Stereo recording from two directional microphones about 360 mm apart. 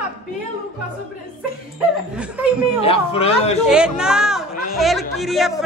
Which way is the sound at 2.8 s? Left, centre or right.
Centre.